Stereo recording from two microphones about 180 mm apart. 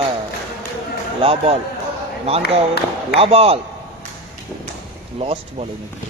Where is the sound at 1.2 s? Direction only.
30° right (ahead or behind).